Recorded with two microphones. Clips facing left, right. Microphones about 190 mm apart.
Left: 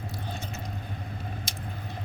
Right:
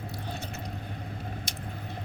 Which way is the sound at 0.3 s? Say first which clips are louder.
Even; 65° right (ahead or behind).